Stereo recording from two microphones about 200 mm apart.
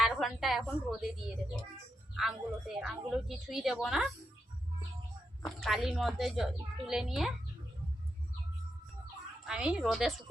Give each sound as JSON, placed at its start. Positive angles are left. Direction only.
{"t": 0.0, "sound": "a woman's voice", "side_deg": 0}
{"t": 2.1, "sound": "a woman's voice", "side_deg": 0}
{"t": 5.5, "sound": "a woman's voice", "side_deg": 0}
{"t": 9.4, "sound": "a woman's voice", "side_deg": -5}